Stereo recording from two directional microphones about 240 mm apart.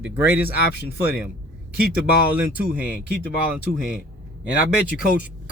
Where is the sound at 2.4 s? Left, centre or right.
Centre.